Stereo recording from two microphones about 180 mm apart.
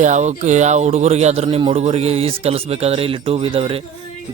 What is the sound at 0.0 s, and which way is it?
A man's voice, 40° right (ahead or behind).